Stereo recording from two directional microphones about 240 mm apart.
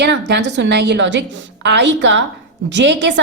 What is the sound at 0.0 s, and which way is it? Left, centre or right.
A woman's voice, right.